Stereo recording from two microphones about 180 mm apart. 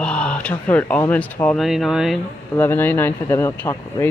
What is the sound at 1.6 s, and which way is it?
Speech, centre (ahead or behind).